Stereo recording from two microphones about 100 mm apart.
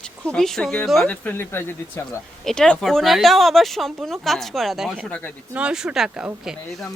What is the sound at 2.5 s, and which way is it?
A woman's voice, 5° left (ahead or behind).